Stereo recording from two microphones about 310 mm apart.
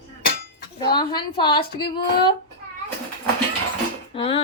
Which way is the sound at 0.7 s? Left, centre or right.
Centre.